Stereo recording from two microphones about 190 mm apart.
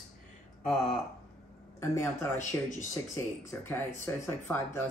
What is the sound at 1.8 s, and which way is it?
Speech, 15° left (ahead or behind).